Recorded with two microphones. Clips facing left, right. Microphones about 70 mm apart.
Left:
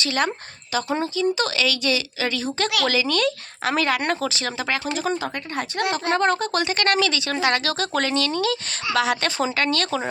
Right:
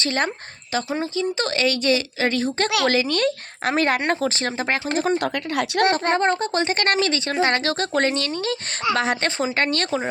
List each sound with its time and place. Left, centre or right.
0.0 s speech: right
5.1 s speech: right
5.9 s speech: right
6.4 s speech: right
9.9 s speech: right